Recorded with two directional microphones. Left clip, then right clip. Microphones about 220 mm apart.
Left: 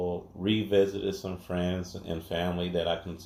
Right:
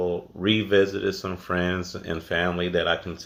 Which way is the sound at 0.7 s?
25° right (ahead or behind).